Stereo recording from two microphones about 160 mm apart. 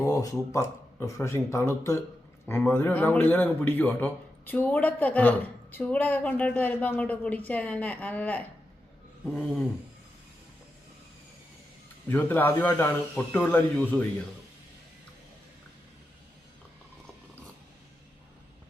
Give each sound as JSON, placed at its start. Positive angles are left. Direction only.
{"t": 0.0, "sound": "a man's voice", "side_deg": 20}
{"t": 9.2, "sound": "a sound", "side_deg": 0}
{"t": 12.0, "sound": "a man's voice", "side_deg": 15}